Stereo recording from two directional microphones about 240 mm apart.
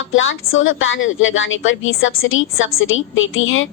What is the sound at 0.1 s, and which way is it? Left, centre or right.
A woman's voice, left.